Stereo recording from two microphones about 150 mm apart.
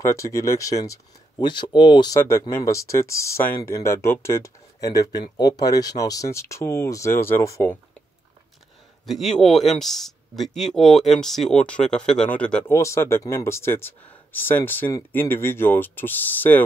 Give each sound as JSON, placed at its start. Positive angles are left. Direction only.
{"t": 0.0, "sound": "speech", "side_deg": 20}
{"t": 2.1, "sound": "speech", "side_deg": 20}
{"t": 9.0, "sound": "speech", "side_deg": 0}
{"t": 12.7, "sound": "speech", "side_deg": 20}